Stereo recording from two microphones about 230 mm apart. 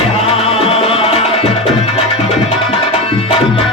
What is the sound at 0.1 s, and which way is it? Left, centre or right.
Music, left.